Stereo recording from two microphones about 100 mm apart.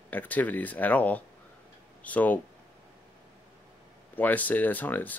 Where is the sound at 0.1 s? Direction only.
15° left (ahead or behind).